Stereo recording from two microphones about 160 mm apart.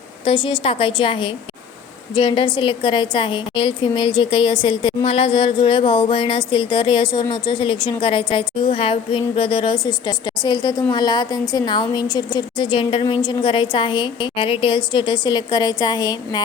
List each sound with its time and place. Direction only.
0.3 s a woman's voice: 30° left (ahead or behind)